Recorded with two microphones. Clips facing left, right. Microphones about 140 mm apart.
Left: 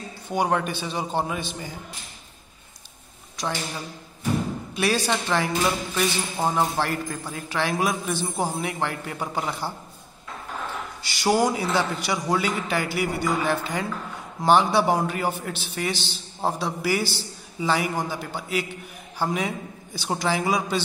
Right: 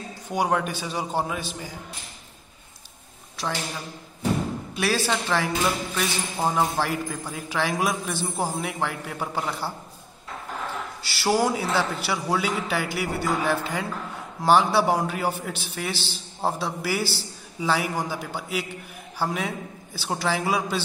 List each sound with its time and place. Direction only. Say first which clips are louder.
0.3 s a man's voice: left 1 dB; 5° right (ahead or behind)
4.7 s a man's voice: left 1 dB; 5° right (ahead or behind)
6.5 s a man's voice: right 1 dB; 5° right (ahead or behind)
11.1 s a man's voice: left 1 dB; 5° right (ahead or behind)